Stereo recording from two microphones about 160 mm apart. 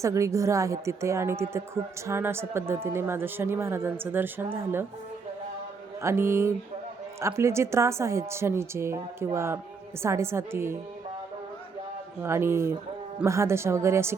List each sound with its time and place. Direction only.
0.0 s a woman's voice: 20° right (ahead or behind)
6.0 s a woman's voice: 15° right (ahead or behind)
12.2 s a woman's voice: 15° right (ahead or behind)